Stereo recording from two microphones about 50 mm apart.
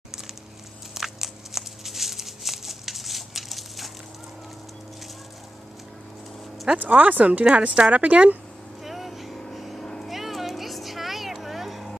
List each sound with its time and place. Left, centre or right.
0.9 s a sound: centre
6.7 s speech: centre
7.0 s speech: right
8.8 s vehicle: centre